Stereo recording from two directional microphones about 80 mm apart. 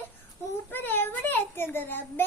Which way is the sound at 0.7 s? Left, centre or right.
Left.